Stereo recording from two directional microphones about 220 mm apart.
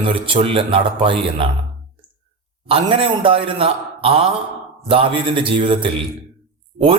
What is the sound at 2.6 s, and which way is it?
A man's voice, 25° right (ahead or behind).